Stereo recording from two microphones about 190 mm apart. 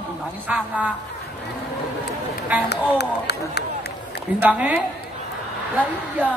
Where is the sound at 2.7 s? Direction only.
60° left (ahead or behind).